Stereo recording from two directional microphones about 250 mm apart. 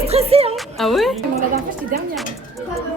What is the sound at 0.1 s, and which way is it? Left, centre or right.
Speech, right.